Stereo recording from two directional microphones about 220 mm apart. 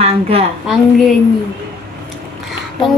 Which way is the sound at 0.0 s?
25° right (ahead or behind).